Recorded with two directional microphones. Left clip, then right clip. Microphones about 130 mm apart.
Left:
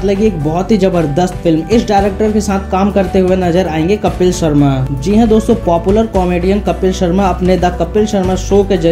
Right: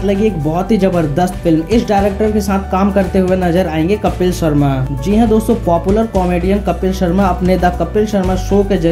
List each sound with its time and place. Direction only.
0.0 s speech: 45° left (ahead or behind)